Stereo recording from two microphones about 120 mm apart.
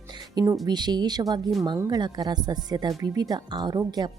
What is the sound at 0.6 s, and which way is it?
Speech, 35° right (ahead or behind).